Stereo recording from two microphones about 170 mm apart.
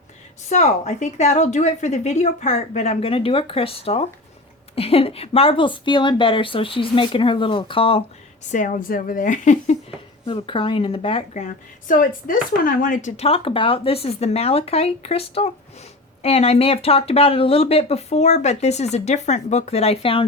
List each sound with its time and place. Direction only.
0.5 s speech: 40° left (ahead or behind)
8.4 s a woman's voice: 50° left (ahead or behind)
10.2 s speech: 30° left (ahead or behind)